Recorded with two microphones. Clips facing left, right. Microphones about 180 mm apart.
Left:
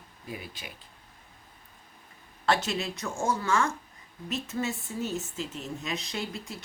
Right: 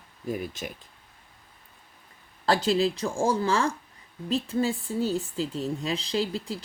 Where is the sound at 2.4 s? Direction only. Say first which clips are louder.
Right 5 dB; 35° right (ahead or behind).